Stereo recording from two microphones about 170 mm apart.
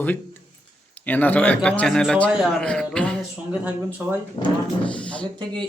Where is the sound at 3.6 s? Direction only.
10° right (ahead or behind).